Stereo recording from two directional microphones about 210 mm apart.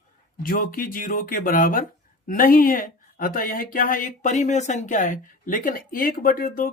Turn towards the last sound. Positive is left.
turn(degrees=40)  # may be behind; listen again after turning